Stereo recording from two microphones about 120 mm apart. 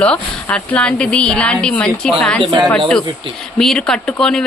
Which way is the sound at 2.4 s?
40° right (ahead or behind).